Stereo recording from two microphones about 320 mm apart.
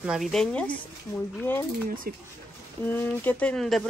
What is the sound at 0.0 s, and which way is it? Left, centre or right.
Speech, centre.